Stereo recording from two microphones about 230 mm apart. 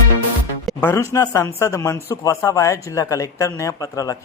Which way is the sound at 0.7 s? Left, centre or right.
Centre.